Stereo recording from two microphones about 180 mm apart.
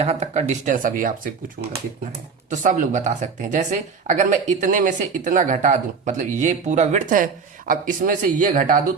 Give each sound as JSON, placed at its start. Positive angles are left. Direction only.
{"t": 0.0, "sound": "speech", "side_deg": -40}
{"t": 2.5, "sound": "speech", "side_deg": -45}